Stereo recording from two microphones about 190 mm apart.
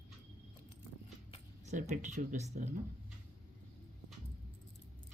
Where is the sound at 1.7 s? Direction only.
40° right (ahead or behind).